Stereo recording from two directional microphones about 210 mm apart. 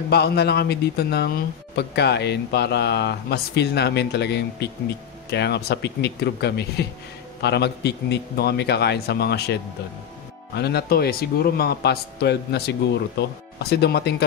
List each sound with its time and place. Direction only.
0.1 s speech: 50° left (ahead or behind)